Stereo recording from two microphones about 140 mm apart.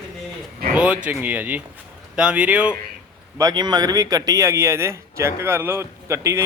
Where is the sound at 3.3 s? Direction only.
30° right (ahead or behind).